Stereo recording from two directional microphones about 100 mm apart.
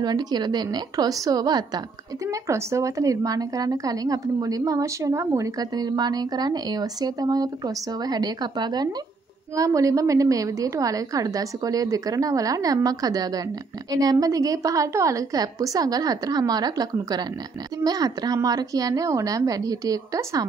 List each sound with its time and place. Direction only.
0.0 s a woman's voice: 45° right (ahead or behind)
2.4 s a woman's voice: 30° right (ahead or behind)
5.6 s a woman's voice: 40° right (ahead or behind)
9.6 s a woman's voice: 35° right (ahead or behind)